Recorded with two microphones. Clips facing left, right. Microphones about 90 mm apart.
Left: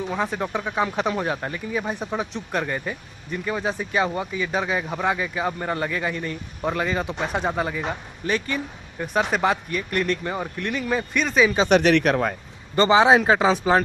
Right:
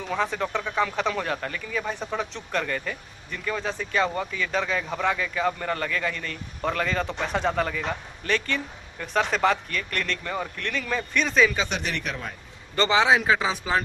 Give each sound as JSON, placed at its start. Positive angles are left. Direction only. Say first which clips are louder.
{"t": 0.0, "sound": "speech", "louder": "left 1 dB", "side_deg": 10}
{"t": 11.2, "sound": "speech", "louder": "left 1 dB", "side_deg": 0}
{"t": 11.7, "sound": "speech", "louder": "left 13 dB", "side_deg": 75}
{"t": 12.9, "sound": "speech", "louder": "left 4 dB", "side_deg": 35}